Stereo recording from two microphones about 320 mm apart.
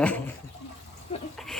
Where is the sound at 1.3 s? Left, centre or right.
Centre.